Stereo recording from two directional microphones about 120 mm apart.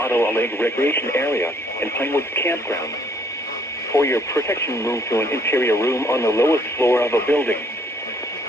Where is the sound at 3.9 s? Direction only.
25° left (ahead or behind).